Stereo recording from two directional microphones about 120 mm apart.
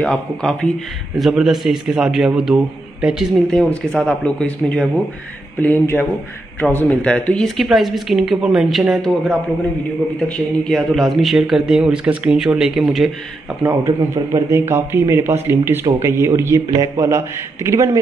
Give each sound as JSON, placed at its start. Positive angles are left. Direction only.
{"t": 0.0, "sound": "a man's voice", "side_deg": 5}
{"t": 3.5, "sound": "a man's voice", "side_deg": 10}
{"t": 13.8, "sound": "speech", "side_deg": -25}